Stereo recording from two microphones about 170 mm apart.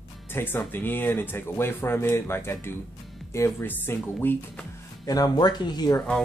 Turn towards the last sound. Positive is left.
turn(degrees=25)  # may be behind; listen again after turning